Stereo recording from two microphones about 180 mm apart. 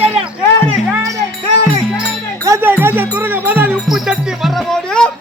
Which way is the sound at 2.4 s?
15° right (ahead or behind).